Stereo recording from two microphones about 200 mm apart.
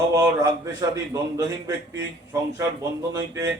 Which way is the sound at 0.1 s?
20° right (ahead or behind).